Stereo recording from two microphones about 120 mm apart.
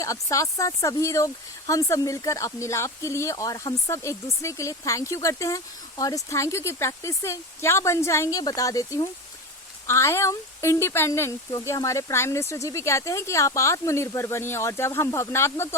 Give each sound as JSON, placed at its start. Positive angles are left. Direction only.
{"t": 0.0, "sound": "speech", "side_deg": 25}